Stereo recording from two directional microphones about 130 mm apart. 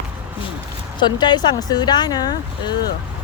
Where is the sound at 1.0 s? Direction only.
35° left (ahead or behind).